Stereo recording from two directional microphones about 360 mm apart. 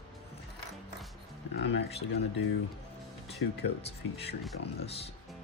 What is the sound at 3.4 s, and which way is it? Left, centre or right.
Speech, left.